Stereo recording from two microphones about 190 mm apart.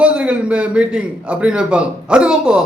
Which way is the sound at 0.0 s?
5° right (ahead or behind).